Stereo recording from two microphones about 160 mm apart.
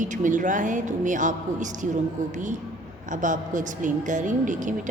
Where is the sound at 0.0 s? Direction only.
50° right (ahead or behind).